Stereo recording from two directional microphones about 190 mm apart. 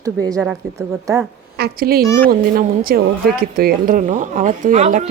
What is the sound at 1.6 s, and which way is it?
A woman's voice, 55° right (ahead or behind).